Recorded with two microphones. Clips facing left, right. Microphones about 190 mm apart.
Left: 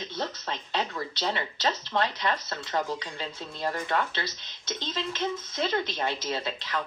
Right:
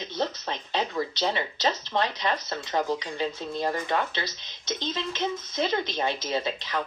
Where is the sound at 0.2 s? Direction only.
15° right (ahead or behind).